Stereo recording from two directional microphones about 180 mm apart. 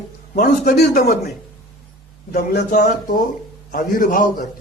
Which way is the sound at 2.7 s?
45° left (ahead or behind).